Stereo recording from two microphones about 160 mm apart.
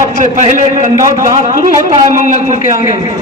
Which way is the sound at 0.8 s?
50° right (ahead or behind).